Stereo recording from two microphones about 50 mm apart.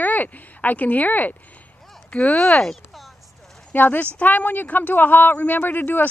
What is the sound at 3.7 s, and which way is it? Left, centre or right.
Speech, left.